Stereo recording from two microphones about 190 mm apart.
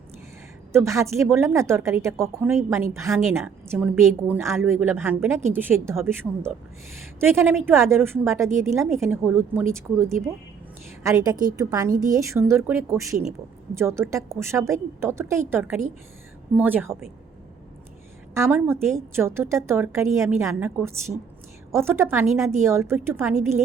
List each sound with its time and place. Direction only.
0.7 s a woman's voice: 15° right (ahead or behind)
18.3 s a woman's voice: 10° right (ahead or behind)